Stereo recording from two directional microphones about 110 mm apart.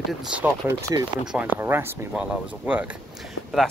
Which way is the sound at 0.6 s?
20° right (ahead or behind).